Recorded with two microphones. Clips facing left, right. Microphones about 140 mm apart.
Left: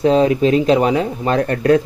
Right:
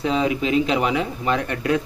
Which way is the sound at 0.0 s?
40° left (ahead or behind).